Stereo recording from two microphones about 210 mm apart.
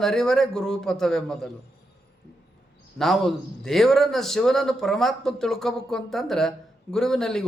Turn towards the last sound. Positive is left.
turn(degrees=0)  # may be behind; listen again after turning